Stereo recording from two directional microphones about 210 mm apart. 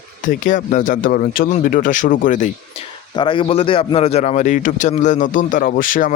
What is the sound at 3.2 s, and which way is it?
A man's voice, 25° left (ahead or behind).